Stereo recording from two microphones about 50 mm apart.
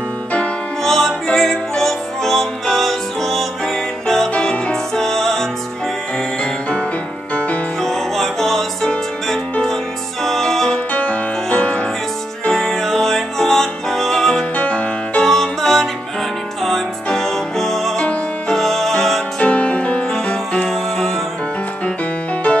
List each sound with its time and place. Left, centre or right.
0.8 s music: centre
7.8 s music: centre
10.9 s music: left
12.4 s music: centre
14.6 s music: left
15.2 s music: centre
19.4 s music: left